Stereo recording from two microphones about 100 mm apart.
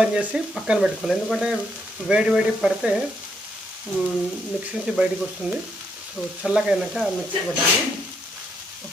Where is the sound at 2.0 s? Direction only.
10° right (ahead or behind).